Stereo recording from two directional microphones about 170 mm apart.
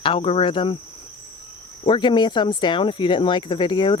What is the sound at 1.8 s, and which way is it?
Speech, 30° left (ahead or behind).